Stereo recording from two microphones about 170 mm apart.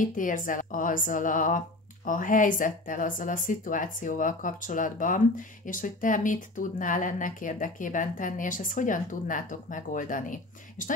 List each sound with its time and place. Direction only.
0.0 s speech: 50° left (ahead or behind)